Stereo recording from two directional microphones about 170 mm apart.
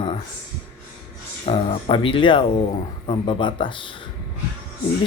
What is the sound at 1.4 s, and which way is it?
Speech, 30° left (ahead or behind).